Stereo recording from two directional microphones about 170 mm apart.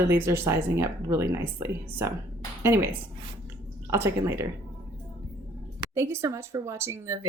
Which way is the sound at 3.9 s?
15° right (ahead or behind).